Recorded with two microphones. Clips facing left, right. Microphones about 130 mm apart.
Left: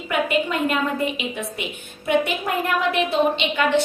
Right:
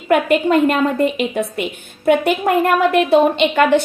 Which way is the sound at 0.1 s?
55° right (ahead or behind).